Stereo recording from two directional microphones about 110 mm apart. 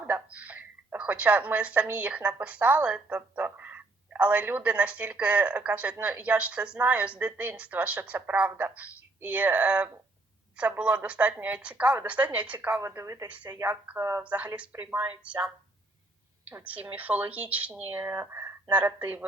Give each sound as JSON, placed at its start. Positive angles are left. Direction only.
{"t": 0.0, "sound": "a woman's voice", "side_deg": -15}
{"t": 12.7, "sound": "a woman's voice", "side_deg": -25}
{"t": 13.2, "sound": "a woman's voice", "side_deg": -15}
{"t": 13.9, "sound": "a woman's voice", "side_deg": -25}
{"t": 14.3, "sound": "a woman's voice", "side_deg": -10}